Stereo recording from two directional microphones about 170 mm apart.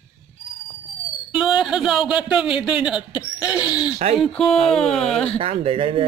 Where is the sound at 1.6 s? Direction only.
5° right (ahead or behind).